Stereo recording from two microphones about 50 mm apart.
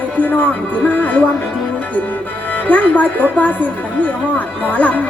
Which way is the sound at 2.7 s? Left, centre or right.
Left.